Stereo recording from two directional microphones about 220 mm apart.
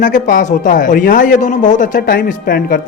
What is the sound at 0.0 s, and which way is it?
Speech, 35° left (ahead or behind).